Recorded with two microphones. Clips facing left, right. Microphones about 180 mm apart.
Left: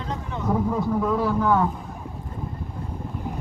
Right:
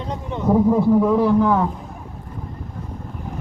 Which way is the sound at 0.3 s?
25° right (ahead or behind).